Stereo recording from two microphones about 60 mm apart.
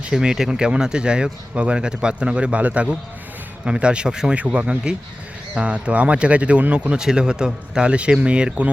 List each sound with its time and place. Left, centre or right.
0.1 s speech: centre